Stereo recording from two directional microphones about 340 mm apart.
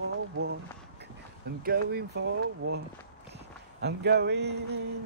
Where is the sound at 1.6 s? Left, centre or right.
Right.